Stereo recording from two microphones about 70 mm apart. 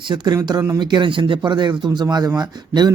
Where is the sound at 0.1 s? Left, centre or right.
Right.